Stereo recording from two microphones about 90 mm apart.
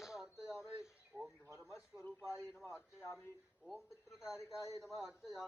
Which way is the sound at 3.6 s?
5° right (ahead or behind).